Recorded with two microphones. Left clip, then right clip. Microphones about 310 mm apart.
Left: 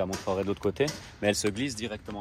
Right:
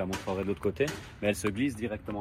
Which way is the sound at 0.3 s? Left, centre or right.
Left.